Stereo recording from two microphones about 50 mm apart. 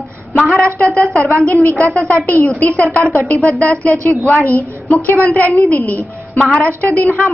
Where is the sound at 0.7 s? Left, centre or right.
Left.